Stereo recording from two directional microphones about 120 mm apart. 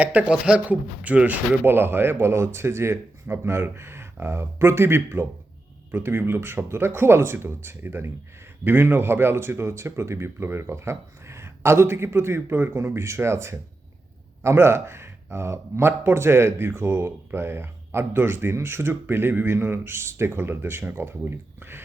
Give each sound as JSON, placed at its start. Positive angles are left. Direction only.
{"t": 0.0, "sound": "speech", "side_deg": -15}